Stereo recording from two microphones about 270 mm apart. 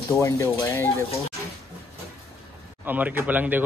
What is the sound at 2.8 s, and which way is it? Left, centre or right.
Speech, centre.